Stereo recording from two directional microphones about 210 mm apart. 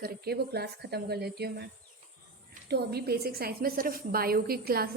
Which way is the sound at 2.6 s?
50° right (ahead or behind).